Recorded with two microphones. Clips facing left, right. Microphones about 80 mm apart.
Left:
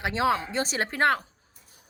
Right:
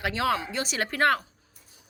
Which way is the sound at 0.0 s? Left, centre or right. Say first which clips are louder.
Left 2 dB; left.